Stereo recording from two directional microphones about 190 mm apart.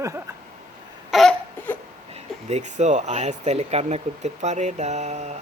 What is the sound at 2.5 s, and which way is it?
Speech, 40° right (ahead or behind).